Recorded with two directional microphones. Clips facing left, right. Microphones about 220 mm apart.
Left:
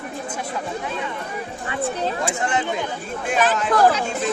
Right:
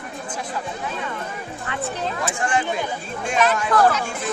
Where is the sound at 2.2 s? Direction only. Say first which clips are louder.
Even; 20° left (ahead or behind).